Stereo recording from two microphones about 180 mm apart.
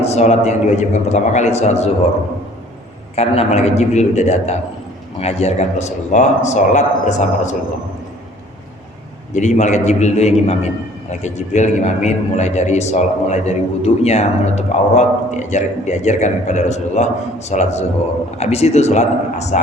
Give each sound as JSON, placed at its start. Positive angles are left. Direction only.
{"t": 0.0, "sound": "a man's voice", "side_deg": 35}
{"t": 3.2, "sound": "a man's voice", "side_deg": 35}
{"t": 9.3, "sound": "a man's voice", "side_deg": 40}